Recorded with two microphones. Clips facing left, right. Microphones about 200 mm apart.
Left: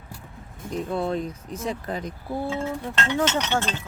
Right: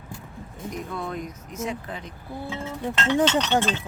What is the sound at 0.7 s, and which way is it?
Speech, 30° left (ahead or behind).